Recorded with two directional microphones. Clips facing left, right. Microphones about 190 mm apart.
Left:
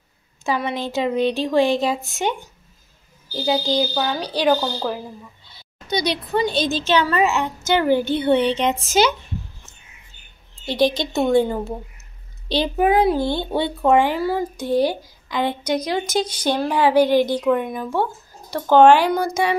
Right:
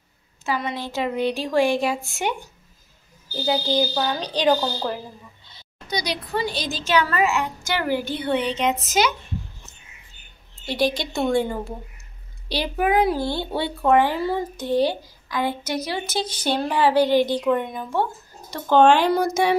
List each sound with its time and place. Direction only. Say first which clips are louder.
0.9 s a child's voice: left 3 dB; 20° left (ahead or behind)
3.3 s a woman's voice: left 2 dB; 15° left (ahead or behind)
5.9 s a child's voice: left 5 dB; 25° left (ahead or behind)
10.9 s a child's voice: left 4 dB; 20° left (ahead or behind)
19.1 s speech: right 1 dB; centre (ahead or behind)